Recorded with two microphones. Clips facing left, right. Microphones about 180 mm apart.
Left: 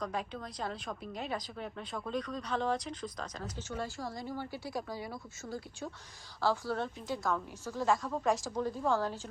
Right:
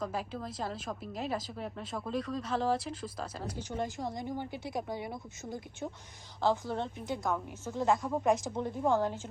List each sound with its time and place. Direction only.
0.0 s a woman's voice: 5° right (ahead or behind); by 9.2 s 20° right (ahead or behind)